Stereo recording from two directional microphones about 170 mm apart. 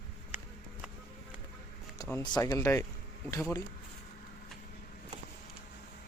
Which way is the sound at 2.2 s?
25° left (ahead or behind).